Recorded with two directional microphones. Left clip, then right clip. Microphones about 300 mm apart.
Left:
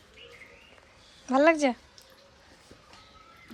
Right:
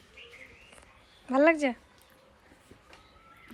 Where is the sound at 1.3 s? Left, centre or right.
Centre.